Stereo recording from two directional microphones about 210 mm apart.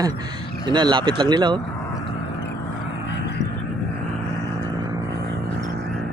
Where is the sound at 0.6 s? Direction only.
20° right (ahead or behind).